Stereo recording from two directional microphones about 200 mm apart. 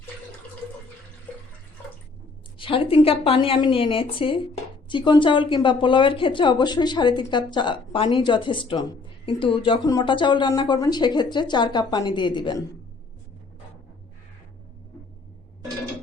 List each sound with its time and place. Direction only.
2.6 s speech: 25° left (ahead or behind)